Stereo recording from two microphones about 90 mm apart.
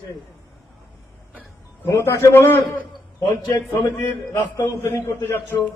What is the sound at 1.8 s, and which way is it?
Speech, 30° left (ahead or behind).